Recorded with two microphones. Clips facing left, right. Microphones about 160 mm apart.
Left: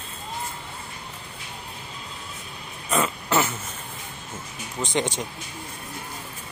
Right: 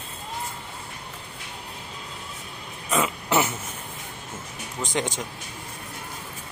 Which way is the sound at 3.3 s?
20° right (ahead or behind).